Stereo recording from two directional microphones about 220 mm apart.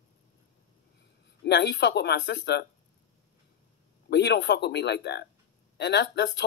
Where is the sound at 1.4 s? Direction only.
50° left (ahead or behind).